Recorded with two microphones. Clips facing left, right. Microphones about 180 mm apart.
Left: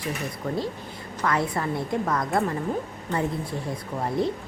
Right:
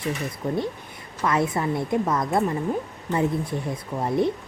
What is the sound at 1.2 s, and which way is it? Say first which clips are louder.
Speech: right 2 dB; 20° right (ahead or behind).